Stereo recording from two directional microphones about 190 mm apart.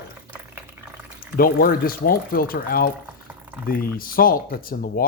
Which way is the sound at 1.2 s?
50° left (ahead or behind).